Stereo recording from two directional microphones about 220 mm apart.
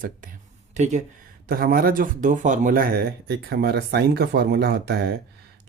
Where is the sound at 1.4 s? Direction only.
45° right (ahead or behind).